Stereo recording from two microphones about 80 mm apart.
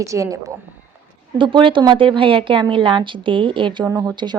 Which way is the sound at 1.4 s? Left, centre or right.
Right.